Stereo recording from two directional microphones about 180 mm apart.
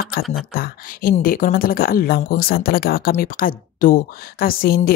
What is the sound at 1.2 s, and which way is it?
Speech, 50° left (ahead or behind).